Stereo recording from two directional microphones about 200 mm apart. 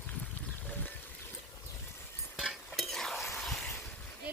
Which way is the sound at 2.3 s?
Centre (ahead or behind).